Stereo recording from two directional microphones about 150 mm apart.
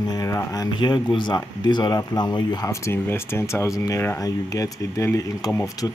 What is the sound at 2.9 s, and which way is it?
Speech, 15° left (ahead or behind).